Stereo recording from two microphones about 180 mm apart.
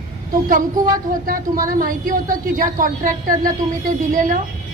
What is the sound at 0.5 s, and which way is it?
A woman's voice, 50° right (ahead or behind).